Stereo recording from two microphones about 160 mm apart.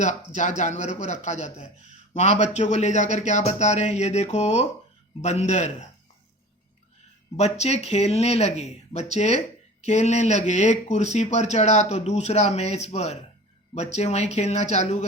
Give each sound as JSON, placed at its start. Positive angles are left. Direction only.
{"t": 0.0, "sound": "speech", "side_deg": 50}
{"t": 7.3, "sound": "speech", "side_deg": 40}